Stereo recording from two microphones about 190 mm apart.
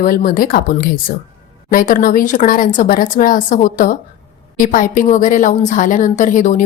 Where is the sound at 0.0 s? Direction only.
45° left (ahead or behind).